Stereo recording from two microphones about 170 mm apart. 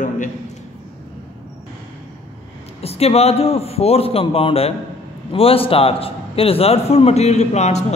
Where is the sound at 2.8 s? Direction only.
35° left (ahead or behind).